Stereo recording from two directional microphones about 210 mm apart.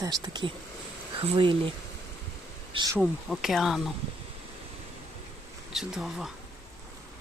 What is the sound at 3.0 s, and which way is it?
Speech, centre (ahead or behind).